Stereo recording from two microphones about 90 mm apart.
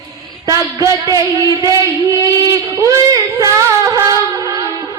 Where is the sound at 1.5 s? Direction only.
40° right (ahead or behind).